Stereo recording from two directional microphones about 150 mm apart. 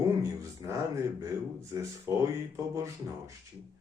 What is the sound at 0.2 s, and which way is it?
Speech, 20° right (ahead or behind).